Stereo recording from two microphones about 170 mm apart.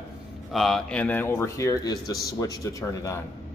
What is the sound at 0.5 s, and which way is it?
Speech, centre (ahead or behind).